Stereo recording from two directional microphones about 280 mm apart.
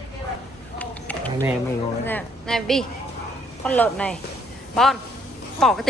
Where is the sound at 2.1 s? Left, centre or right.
Centre.